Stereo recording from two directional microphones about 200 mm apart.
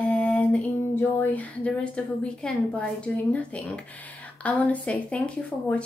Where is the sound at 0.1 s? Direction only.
5° left (ahead or behind).